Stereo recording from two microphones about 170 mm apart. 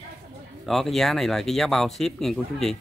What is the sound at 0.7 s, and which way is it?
Speech, centre (ahead or behind).